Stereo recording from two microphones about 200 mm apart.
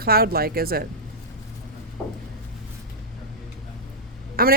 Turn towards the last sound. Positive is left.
turn(degrees=-45)  # may be behind; listen again after turning